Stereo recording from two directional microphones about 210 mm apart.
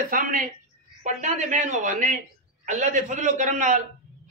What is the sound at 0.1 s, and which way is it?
A woman's voice, 40° right (ahead or behind).